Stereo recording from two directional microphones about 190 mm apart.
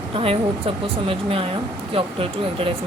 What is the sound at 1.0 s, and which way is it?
Speech, 30° right (ahead or behind).